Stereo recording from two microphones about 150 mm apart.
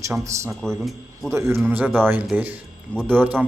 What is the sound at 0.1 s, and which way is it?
Speech, 20° right (ahead or behind).